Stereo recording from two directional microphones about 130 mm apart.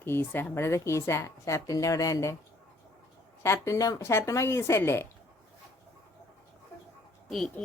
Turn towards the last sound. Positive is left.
turn(degrees=0)  # may be behind; listen again after turning